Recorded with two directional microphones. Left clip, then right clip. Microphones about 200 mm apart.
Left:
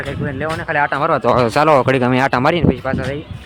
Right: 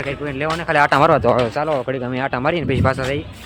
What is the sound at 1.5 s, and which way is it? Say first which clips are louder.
Speech: left 8 dB; 35° left (ahead or behind).